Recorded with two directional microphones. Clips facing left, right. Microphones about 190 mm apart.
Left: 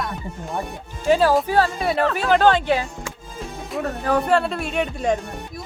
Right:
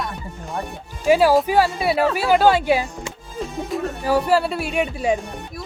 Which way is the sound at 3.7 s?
5° right (ahead or behind).